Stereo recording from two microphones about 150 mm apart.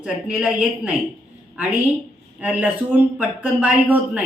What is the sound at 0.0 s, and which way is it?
Speech, 5° right (ahead or behind).